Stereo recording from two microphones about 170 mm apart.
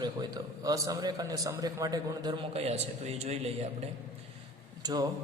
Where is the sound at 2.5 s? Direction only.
40° right (ahead or behind).